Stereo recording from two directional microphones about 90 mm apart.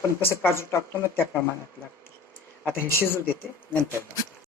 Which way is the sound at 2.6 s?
25° left (ahead or behind).